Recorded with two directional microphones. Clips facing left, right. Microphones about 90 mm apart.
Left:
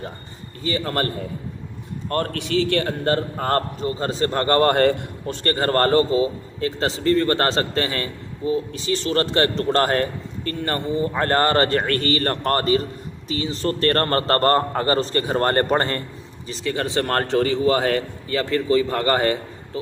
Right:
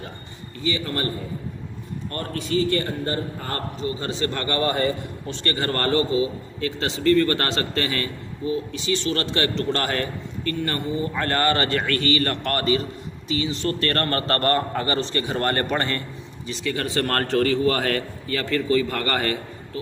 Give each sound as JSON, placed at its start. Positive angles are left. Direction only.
{"t": 0.6, "sound": "a man's voice", "side_deg": 45}
{"t": 2.0, "sound": "a man's voice", "side_deg": 60}
{"t": 5.3, "sound": "a man's voice", "side_deg": 40}